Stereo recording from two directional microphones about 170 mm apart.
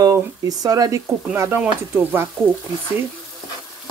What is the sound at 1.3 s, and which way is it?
Dishes, 15° right (ahead or behind).